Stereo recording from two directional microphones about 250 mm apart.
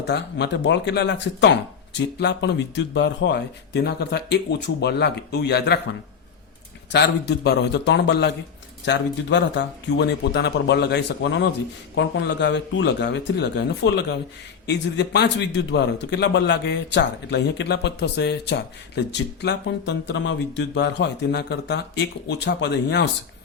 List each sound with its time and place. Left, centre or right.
0.0 s a man's voice: left
6.9 s a man's voice: left